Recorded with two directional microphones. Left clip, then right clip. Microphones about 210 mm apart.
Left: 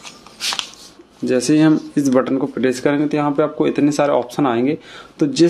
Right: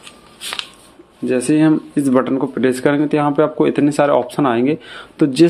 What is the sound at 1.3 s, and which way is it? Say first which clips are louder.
Speech: even; centre (ahead or behind).